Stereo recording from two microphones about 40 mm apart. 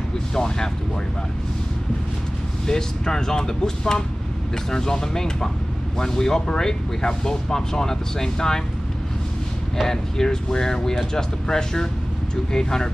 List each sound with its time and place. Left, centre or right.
0.3 s speech: centre
2.6 s speech: centre
9.8 s speech: centre